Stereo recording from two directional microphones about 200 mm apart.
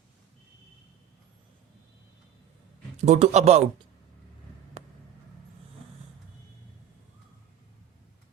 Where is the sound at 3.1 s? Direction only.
35° right (ahead or behind).